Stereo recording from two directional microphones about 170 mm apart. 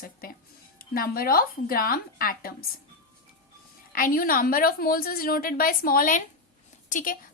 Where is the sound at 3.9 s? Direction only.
55° left (ahead or behind).